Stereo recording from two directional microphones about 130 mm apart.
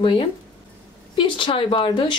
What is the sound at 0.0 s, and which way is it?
Speech, 40° left (ahead or behind).